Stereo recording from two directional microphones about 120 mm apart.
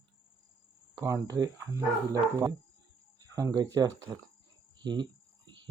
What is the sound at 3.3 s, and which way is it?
Speech, 30° right (ahead or behind).